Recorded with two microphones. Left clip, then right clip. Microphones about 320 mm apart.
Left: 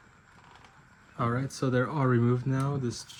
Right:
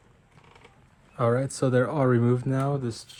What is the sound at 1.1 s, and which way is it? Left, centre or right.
Speech, centre.